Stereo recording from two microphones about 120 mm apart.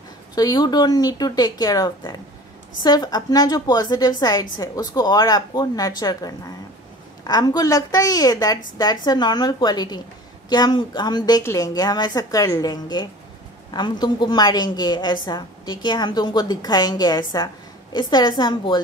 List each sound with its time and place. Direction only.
0.4 s a woman's voice: 35° left (ahead or behind)